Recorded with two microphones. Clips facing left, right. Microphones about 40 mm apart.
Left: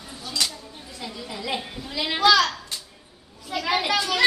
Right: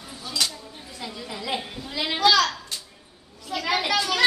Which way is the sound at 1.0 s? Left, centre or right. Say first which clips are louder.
Left 1 dB; centre.